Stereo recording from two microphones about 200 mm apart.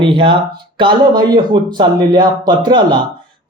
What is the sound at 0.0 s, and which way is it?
Speech, 25° right (ahead or behind).